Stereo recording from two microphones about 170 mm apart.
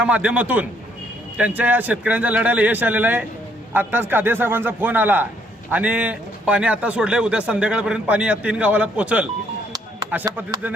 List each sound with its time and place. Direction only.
0.0 s a man's voice: 5° right (ahead or behind)